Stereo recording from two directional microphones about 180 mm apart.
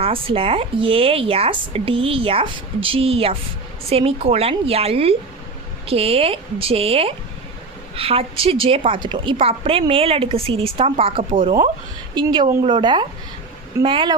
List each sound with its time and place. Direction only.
0.0 s a woman's voice: 30° right (ahead or behind)